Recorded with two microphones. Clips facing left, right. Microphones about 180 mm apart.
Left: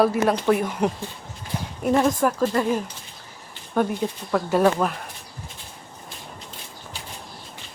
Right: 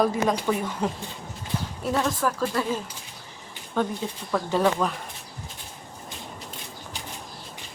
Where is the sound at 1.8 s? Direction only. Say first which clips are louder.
Left 6 dB; 20° left (ahead or behind).